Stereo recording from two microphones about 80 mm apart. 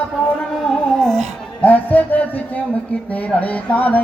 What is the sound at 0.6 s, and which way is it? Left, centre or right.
Music, centre.